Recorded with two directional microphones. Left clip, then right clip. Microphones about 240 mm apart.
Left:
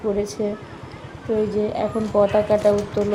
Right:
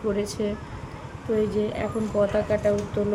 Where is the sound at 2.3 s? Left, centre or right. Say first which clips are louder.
Left 6 dB; centre.